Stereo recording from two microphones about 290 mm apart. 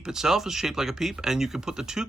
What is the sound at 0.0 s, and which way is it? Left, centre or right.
Speech, centre.